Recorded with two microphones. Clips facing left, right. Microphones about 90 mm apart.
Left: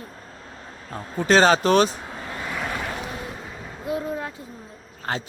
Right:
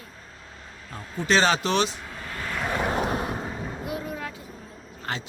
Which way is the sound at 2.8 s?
45° right (ahead or behind).